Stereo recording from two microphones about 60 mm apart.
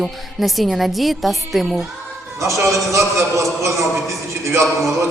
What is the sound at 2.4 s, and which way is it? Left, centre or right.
A man's voice, right.